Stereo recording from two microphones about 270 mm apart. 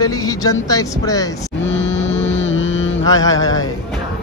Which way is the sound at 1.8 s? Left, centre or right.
Left.